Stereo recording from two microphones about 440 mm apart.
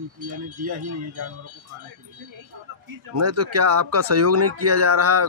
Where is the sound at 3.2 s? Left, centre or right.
Right.